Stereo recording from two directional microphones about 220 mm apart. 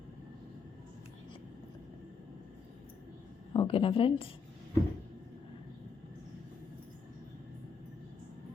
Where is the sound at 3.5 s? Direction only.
25° left (ahead or behind).